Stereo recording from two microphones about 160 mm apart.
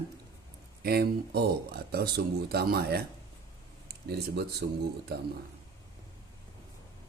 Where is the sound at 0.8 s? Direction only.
75° right (ahead or behind).